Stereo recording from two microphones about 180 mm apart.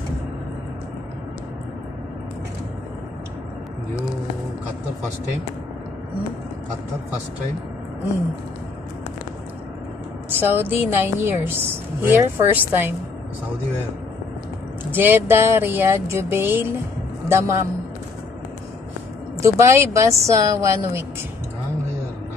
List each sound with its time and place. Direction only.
10.4 s a woman's voice: 10° right (ahead or behind)
14.9 s a woman's voice: 10° right (ahead or behind)
19.4 s a woman's voice: 15° right (ahead or behind)